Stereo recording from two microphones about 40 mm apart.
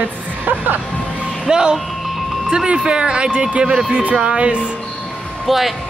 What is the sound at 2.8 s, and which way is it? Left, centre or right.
Speech, right.